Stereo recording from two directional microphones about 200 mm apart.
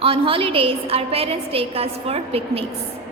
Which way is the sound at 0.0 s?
25° right (ahead or behind).